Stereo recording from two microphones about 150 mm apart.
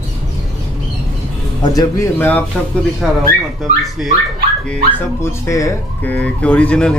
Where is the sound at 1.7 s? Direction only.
20° left (ahead or behind).